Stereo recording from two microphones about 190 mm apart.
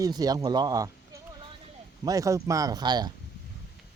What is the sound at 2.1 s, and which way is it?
Speech, 15° right (ahead or behind).